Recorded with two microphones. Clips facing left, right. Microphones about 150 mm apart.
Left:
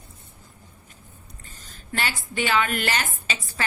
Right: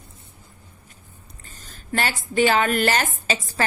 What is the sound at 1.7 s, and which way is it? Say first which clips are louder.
A woman's voice: right 4 dB; 45° right (ahead or behind).